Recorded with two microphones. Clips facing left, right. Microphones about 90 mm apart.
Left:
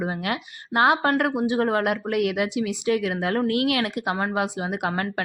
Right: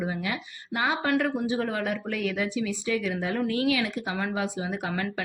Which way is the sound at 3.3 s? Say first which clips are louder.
Left 3 dB; 60° left (ahead or behind).